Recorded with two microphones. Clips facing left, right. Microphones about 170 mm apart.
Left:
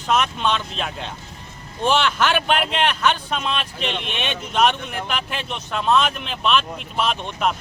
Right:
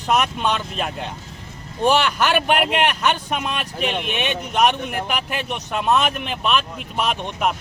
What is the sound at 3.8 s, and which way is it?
Speech, 50° right (ahead or behind).